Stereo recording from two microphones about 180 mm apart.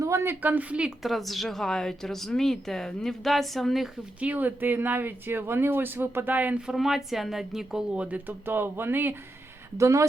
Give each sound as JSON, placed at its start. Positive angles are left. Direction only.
{"t": 0.0, "sound": "a woman's voice", "side_deg": -15}